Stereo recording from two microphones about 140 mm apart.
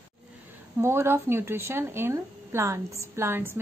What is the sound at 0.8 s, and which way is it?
Speech, 15° right (ahead or behind).